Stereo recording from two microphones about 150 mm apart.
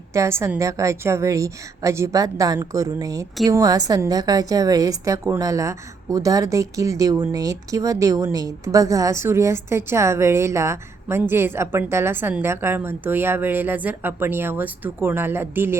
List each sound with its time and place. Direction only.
0.1 s a woman's voice: 20° right (ahead or behind)